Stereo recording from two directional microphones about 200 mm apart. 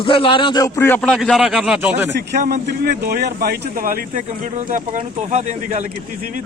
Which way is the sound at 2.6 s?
50° right (ahead or behind).